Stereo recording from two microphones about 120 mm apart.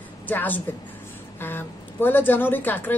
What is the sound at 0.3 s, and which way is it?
Speech, 15° left (ahead or behind).